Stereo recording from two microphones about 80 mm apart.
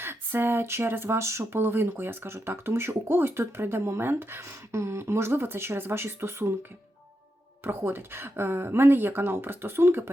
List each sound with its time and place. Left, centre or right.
0.0 s speech: right